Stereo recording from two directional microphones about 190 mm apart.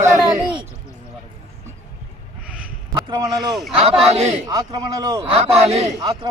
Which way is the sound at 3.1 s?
20° right (ahead or behind).